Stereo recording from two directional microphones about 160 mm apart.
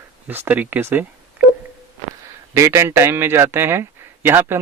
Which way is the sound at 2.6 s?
15° right (ahead or behind).